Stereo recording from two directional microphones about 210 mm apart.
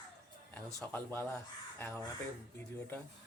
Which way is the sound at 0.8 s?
10° left (ahead or behind).